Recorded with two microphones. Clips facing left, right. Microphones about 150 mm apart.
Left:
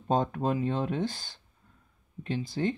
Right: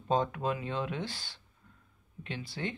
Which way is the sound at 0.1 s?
45° left (ahead or behind).